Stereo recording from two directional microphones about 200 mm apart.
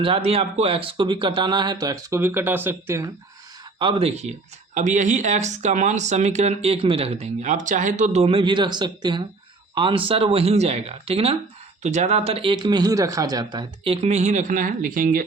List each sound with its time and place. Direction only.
0.0 s speech: 30° right (ahead or behind)
3.8 s speech: 30° right (ahead or behind); by 15.3 s 45° right (ahead or behind)